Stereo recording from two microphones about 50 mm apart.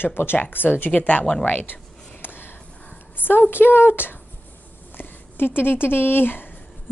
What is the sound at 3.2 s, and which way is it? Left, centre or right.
A woman's voice, left.